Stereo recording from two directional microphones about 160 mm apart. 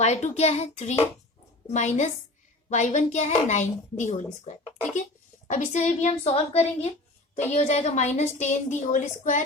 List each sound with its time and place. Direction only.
0.0 s a woman's voice: 45° left (ahead or behind)